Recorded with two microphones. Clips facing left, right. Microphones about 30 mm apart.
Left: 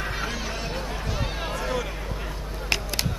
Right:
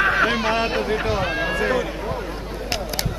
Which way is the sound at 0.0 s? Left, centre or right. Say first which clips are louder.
Right 12 dB; right.